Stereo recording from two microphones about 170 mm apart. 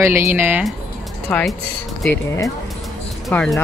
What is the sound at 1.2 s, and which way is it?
Speech, 5° left (ahead or behind).